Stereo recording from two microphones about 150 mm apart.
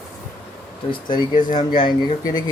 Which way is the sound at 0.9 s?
30° left (ahead or behind).